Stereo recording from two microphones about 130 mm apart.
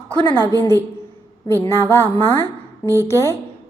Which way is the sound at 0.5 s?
15° left (ahead or behind).